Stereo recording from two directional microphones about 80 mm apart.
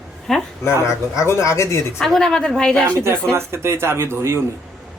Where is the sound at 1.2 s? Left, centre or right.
Left.